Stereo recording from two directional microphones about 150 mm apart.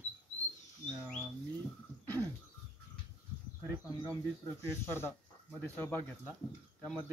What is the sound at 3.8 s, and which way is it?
Speech, 20° left (ahead or behind).